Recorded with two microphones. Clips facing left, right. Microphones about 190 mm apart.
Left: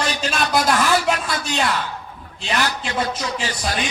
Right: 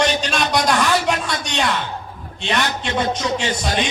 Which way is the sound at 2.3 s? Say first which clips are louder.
Right 1 dB; 5° left (ahead or behind).